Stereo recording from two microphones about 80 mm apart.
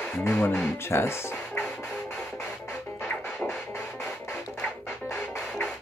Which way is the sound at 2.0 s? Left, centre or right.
Left.